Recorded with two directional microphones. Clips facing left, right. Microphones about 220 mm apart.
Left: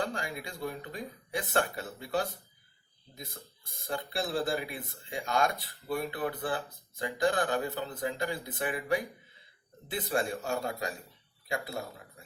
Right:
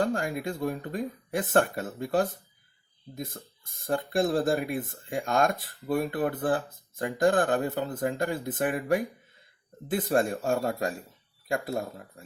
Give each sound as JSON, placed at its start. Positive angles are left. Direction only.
{"t": 0.0, "sound": "speech", "side_deg": -50}